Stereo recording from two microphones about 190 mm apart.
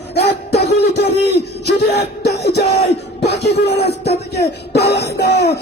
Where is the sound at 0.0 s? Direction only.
60° left (ahead or behind).